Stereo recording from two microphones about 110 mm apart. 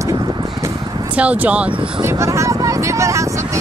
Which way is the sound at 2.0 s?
25° right (ahead or behind).